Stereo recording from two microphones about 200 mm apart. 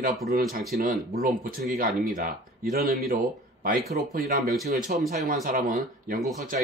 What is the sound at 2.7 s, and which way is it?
Speech, 50° right (ahead or behind).